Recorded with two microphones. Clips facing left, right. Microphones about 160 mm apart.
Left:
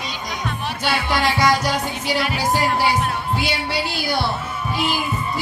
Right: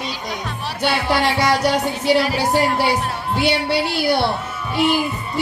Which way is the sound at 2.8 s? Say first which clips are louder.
Even; 65° right (ahead or behind).